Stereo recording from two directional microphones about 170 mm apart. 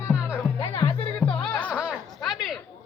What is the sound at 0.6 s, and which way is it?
Music, 35° left (ahead or behind).